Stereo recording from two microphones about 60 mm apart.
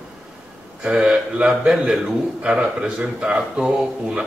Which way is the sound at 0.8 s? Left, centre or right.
Centre.